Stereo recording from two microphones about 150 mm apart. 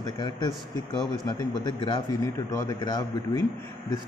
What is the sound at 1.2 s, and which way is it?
Speech, 30° left (ahead or behind).